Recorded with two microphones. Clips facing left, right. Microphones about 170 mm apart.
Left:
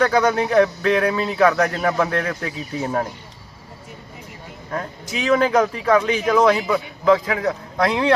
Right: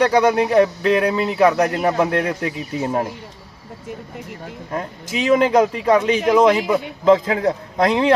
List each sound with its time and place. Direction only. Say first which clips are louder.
0.0 s speech: right 2 dB; 15° right (ahead or behind)
4.7 s speech: right 1 dB; 20° right (ahead or behind)